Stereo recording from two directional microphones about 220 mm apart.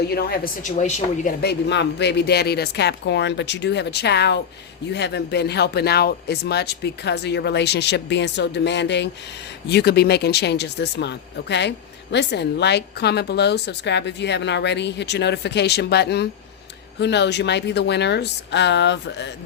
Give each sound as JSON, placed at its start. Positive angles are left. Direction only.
{"t": 0.1, "sound": "a woman's voice", "side_deg": 45}
{"t": 1.4, "sound": "speech", "side_deg": 50}